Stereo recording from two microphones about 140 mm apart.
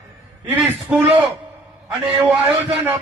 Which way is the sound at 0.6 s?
10° right (ahead or behind).